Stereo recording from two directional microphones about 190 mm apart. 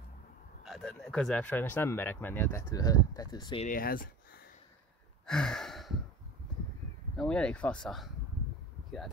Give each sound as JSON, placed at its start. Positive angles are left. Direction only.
{"t": 0.7, "sound": "speech", "side_deg": 0}
{"t": 3.6, "sound": "a sound", "side_deg": 50}
{"t": 5.2, "sound": "sigh", "side_deg": 5}
{"t": 7.2, "sound": "speech", "side_deg": 5}